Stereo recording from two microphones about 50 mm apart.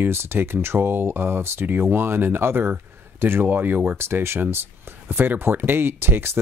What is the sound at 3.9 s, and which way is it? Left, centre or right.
Speech, right.